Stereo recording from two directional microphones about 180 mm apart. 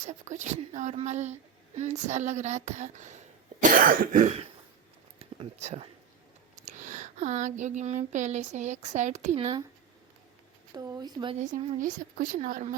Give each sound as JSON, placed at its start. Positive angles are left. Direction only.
{"t": 0.0, "sound": "a woman's voice", "side_deg": -40}
{"t": 10.8, "sound": "speech", "side_deg": -20}
{"t": 11.3, "sound": "a woman's voice", "side_deg": -40}